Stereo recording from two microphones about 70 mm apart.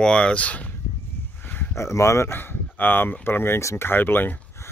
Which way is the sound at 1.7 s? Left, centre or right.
Left.